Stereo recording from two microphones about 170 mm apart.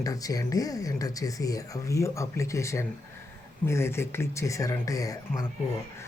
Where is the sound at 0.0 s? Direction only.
20° left (ahead or behind).